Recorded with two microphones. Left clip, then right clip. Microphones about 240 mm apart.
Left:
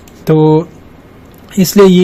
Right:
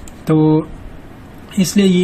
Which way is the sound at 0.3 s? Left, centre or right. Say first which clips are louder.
Left 5 dB; left.